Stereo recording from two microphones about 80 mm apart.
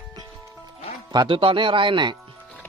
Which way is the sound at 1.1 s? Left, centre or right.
Right.